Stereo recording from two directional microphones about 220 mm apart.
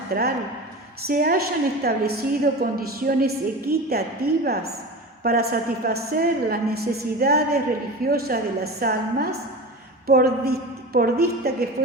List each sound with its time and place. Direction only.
0.1 s a woman's voice: 45° right (ahead or behind)
5.2 s a woman's voice: 45° right (ahead or behind)